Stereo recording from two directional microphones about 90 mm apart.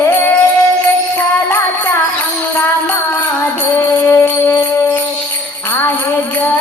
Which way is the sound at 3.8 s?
25° left (ahead or behind).